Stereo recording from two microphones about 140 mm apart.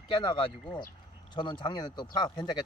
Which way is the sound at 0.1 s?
30° left (ahead or behind).